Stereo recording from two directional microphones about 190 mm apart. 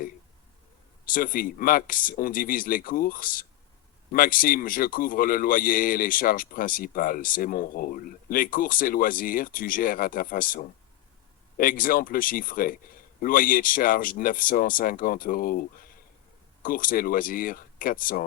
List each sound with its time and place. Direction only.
1.1 s a man's voice: 50° left (ahead or behind)